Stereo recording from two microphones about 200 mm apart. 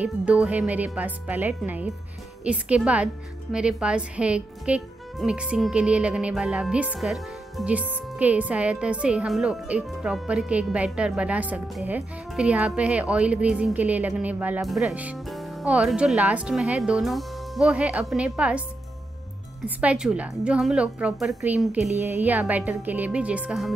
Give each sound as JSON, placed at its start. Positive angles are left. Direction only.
{"t": 0.0, "sound": "speech", "side_deg": -5}
{"t": 19.8, "sound": "speech", "side_deg": -5}